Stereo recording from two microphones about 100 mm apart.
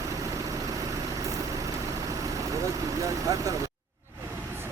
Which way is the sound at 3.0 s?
35° right (ahead or behind).